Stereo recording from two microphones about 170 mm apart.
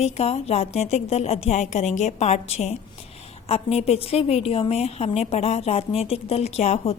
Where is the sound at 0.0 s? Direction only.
40° left (ahead or behind).